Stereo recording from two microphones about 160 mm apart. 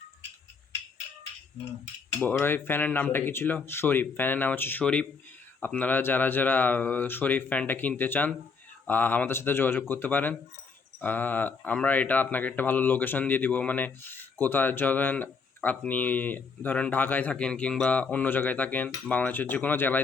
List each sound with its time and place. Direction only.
2.1 s speech: 15° left (ahead or behind)